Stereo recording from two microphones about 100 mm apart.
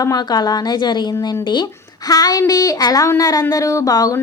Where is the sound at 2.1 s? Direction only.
40° left (ahead or behind).